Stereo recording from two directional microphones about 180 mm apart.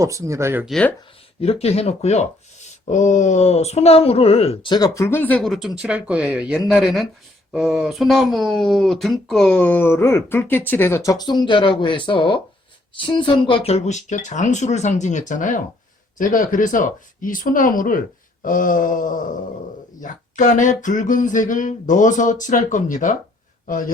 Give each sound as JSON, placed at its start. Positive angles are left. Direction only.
{"t": 0.0, "sound": "speech", "side_deg": -15}
{"t": 0.6, "sound": "speech", "side_deg": 5}
{"t": 1.4, "sound": "a man's voice", "side_deg": 35}